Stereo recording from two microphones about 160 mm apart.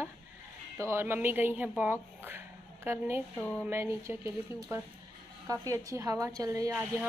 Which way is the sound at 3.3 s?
10° left (ahead or behind).